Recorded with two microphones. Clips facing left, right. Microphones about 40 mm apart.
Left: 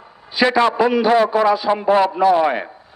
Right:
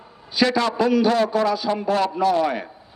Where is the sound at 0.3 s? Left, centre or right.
Left.